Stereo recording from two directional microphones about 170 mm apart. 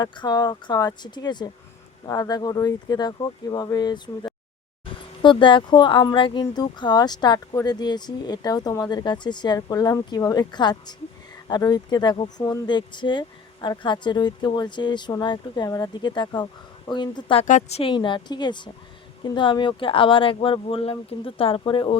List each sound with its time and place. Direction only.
0.0 s speech: 25° left (ahead or behind)
17.4 s speech: 40° left (ahead or behind)